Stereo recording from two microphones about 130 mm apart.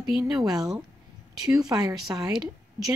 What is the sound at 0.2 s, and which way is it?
Speech, 30° right (ahead or behind).